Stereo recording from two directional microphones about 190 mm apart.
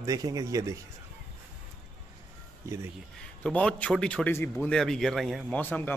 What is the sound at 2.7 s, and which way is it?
Speech, 15° right (ahead or behind).